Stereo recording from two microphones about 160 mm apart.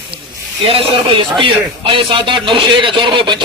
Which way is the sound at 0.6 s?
35° right (ahead or behind).